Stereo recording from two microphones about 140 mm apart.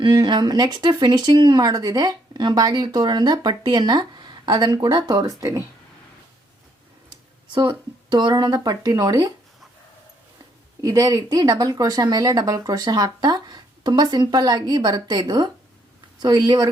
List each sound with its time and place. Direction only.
0.0 s speech: 30° right (ahead or behind)
7.5 s speech: 30° right (ahead or behind)
10.8 s speech: 25° right (ahead or behind)